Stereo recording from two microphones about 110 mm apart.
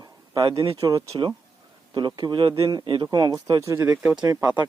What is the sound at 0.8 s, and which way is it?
Speech, 35° right (ahead or behind).